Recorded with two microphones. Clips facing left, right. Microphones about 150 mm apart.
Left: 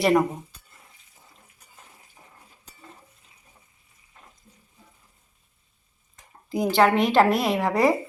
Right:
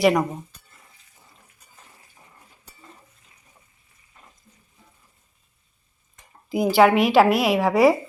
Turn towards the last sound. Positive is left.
turn(degrees=-5)  # may be behind; listen again after turning